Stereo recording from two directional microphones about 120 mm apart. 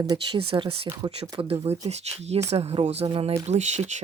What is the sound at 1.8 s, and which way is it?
Speech, 65° right (ahead or behind).